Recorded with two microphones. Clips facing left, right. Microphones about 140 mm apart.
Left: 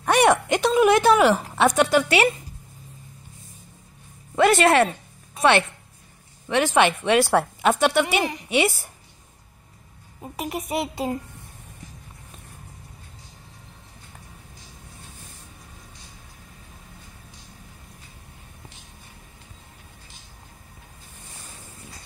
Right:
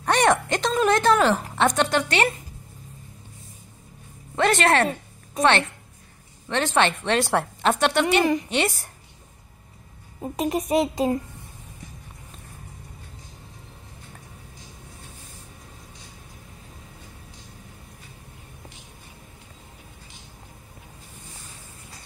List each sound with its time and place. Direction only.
0.0 s a woman's voice: 10° left (ahead or behind)
4.4 s a woman's voice: 10° left (ahead or behind)
6.5 s a woman's voice: 10° left (ahead or behind)
10.4 s speech: 40° right (ahead or behind)